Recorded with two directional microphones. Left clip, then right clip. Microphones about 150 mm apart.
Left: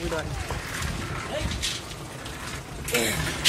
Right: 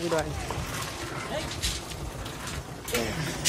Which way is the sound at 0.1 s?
20° right (ahead or behind).